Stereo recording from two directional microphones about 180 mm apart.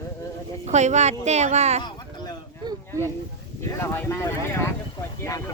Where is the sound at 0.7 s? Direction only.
40° right (ahead or behind).